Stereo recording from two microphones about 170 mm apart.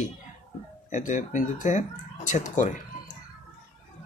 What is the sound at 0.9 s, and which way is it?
Speech, 45° left (ahead or behind).